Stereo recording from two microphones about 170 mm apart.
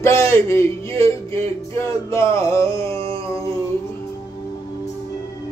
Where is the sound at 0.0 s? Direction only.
15° left (ahead or behind).